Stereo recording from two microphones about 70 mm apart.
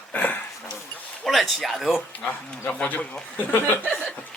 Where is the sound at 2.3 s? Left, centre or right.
Left.